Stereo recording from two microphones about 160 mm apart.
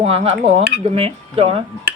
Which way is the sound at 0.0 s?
40° right (ahead or behind).